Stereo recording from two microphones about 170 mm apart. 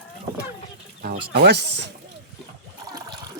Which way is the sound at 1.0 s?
75° right (ahead or behind).